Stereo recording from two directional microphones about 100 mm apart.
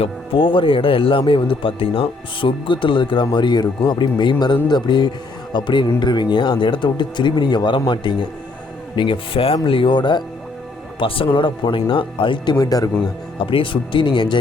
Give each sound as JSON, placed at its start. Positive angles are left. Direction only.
{"t": 0.0, "sound": "speech", "side_deg": 60}
{"t": 11.0, "sound": "speech", "side_deg": 65}
{"t": 12.5, "sound": "speech", "side_deg": 40}
{"t": 13.4, "sound": "speech", "side_deg": 60}